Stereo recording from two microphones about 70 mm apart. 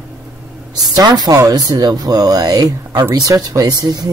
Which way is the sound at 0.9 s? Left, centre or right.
Right.